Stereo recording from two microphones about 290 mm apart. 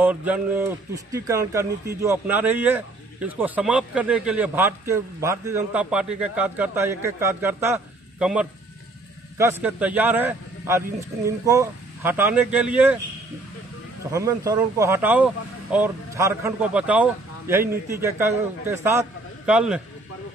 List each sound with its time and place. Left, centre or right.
0.0 s a man's voice: centre
14.1 s a man's voice: centre